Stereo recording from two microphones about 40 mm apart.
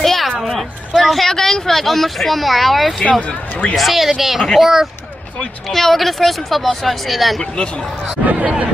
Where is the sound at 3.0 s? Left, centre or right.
Left.